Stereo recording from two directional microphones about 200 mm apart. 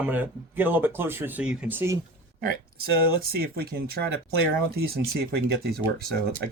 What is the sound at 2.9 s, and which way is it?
Speech, 50° right (ahead or behind).